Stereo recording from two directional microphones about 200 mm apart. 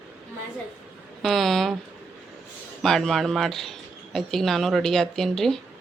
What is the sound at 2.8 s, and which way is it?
A woman's voice, centre (ahead or behind).